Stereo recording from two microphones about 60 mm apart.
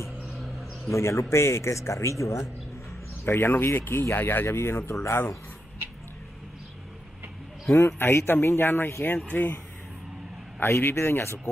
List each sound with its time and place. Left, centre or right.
0.2 s a sound: centre
0.8 s speech: left
3.3 s speech: left
4.9 s speech: left
8.0 s speech: left
10.6 s speech: left